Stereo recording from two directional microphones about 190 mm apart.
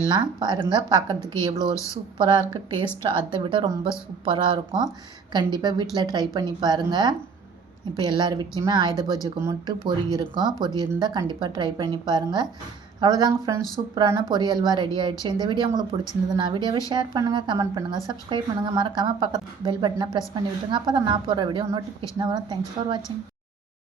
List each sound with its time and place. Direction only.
0.1 s a woman's voice: 25° right (ahead or behind)
1.2 s a woman's voice: 15° left (ahead or behind)
2.1 s a woman's voice: 25° right (ahead or behind)